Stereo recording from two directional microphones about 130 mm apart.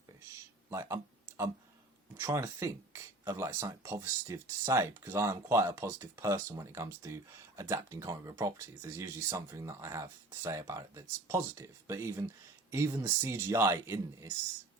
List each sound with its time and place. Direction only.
0.7 s speech: 25° right (ahead or behind)
2.1 s speech: 20° right (ahead or behind)